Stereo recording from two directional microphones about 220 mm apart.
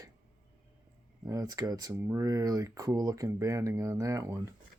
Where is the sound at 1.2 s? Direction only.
15° right (ahead or behind).